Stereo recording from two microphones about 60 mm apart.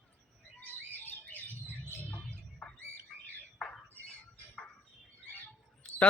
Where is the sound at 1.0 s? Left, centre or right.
Left.